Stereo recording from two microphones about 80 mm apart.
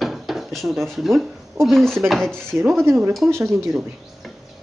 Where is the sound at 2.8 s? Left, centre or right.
Right.